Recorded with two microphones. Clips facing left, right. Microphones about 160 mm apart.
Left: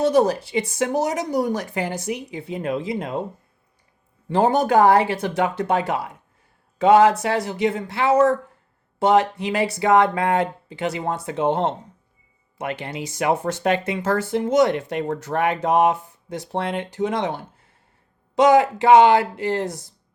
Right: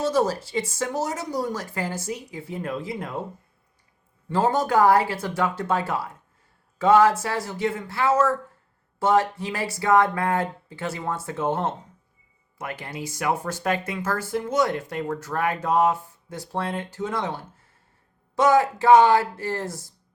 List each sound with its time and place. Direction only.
0.1 s a woman's voice: 15° left (ahead or behind)
4.3 s a woman's voice: 20° left (ahead or behind)
12.8 s speech: 20° left (ahead or behind)
13.3 s speech: 70° left (ahead or behind)
13.6 s a woman's voice: 20° left (ahead or behind)